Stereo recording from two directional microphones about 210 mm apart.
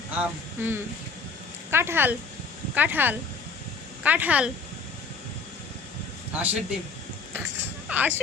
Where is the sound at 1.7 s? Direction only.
10° right (ahead or behind).